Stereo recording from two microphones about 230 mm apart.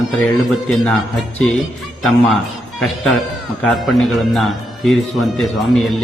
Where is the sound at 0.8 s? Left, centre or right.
Centre.